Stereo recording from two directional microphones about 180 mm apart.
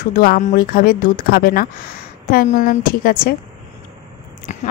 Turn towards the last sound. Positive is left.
turn(degrees=40)  # may be behind; listen again after turning